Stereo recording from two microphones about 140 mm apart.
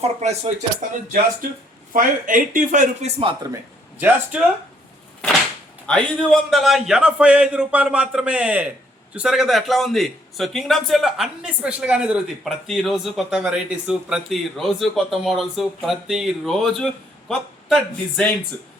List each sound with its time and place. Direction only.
0.0 s speech: 50° right (ahead or behind); by 1.5 s 65° right (ahead or behind)
1.9 s speech: 75° right (ahead or behind)
3.5 s speech: 10° right (ahead or behind)
5.8 s a man's voice: 5° left (ahead or behind)